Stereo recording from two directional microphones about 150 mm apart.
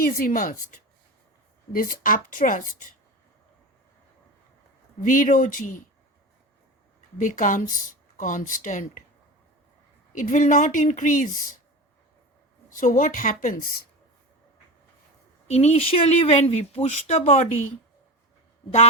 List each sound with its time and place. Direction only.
0.0 s a woman's voice: 70° left (ahead or behind)
4.9 s speech: 65° left (ahead or behind)
7.2 s speech: 60° left (ahead or behind)
10.2 s speech: 60° left (ahead or behind)
12.7 s speech: 60° left (ahead or behind)
15.4 s speech: 45° left (ahead or behind)